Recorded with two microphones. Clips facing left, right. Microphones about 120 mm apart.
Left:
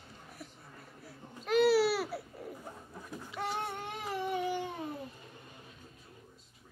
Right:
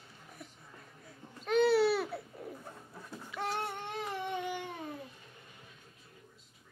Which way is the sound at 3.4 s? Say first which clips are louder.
Even; centre (ahead or behind).